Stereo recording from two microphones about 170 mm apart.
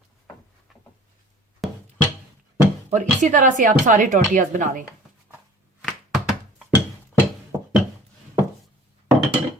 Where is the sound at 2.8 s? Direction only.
45° right (ahead or behind).